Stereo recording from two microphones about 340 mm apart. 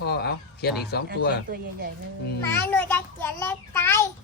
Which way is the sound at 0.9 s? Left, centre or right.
Left.